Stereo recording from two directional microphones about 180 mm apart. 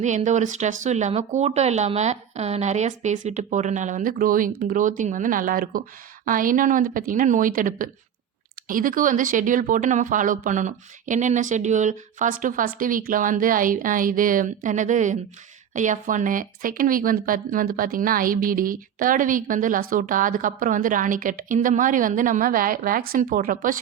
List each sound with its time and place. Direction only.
0.0 s speech: 40° right (ahead or behind)